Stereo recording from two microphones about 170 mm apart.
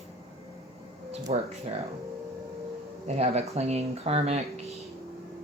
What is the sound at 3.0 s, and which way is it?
Speech, 40° right (ahead or behind).